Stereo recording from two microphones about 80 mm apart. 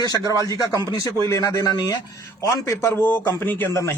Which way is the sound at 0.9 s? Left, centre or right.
Left.